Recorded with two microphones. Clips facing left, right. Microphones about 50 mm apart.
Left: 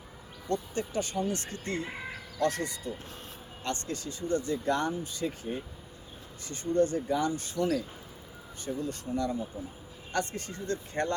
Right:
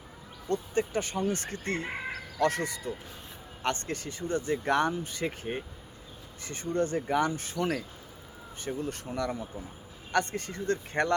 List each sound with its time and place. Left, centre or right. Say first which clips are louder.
0.4 s speech: right 3 dB; right
2.4 s speech: right 2 dB; right
6.4 s speech: left 3 dB; right